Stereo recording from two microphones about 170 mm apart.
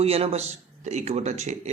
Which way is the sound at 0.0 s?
35° right (ahead or behind).